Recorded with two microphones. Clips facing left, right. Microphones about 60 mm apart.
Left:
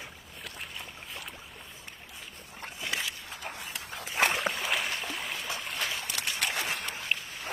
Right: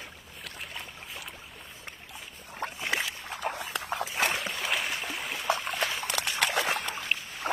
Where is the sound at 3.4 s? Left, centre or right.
Right.